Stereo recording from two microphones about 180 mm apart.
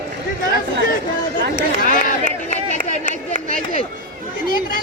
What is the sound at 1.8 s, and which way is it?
Run, 50° left (ahead or behind).